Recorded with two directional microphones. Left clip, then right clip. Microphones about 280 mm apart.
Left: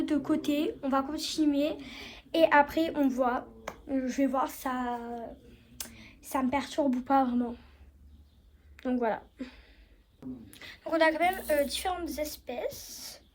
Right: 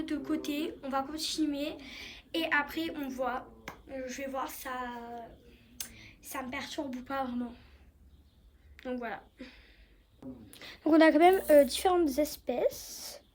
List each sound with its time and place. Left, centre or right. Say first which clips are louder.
0.3 s a woman's voice: left 5 dB; centre
8.7 s a woman's voice: left 8 dB; centre
10.5 s a woman's voice: right 5 dB; right